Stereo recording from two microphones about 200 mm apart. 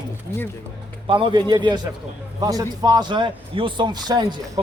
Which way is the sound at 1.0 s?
25° right (ahead or behind).